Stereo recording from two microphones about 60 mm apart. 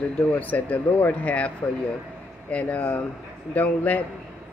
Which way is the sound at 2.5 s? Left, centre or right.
Left.